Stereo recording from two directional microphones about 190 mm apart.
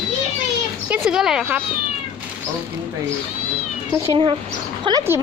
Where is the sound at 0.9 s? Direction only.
5° right (ahead or behind).